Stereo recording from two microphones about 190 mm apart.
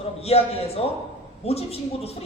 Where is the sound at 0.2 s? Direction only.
30° left (ahead or behind).